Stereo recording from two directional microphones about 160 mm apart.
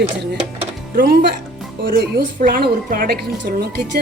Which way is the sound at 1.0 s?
75° right (ahead or behind).